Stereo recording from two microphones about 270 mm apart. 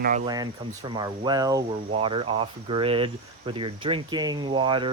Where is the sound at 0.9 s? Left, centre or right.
Centre.